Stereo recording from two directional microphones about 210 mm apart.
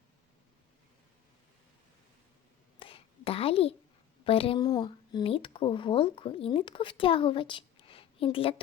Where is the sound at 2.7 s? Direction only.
25° left (ahead or behind).